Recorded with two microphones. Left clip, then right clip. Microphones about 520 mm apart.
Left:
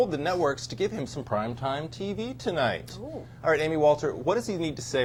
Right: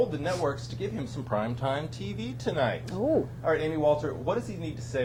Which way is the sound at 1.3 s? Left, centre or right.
Left.